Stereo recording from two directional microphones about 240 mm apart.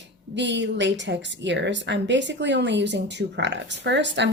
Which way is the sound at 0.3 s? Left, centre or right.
Right.